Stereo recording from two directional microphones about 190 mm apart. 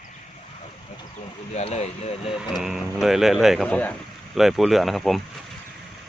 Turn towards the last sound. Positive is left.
turn(degrees=0)  # may be behind; listen again after turning